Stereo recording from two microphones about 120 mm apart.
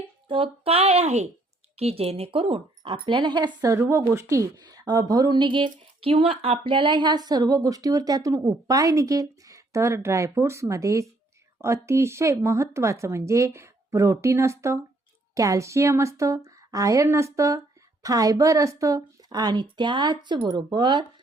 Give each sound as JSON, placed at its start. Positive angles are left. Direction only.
{"t": 0.3, "sound": "speech", "side_deg": -50}